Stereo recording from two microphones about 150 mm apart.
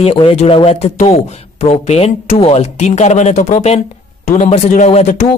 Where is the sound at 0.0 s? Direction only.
40° left (ahead or behind).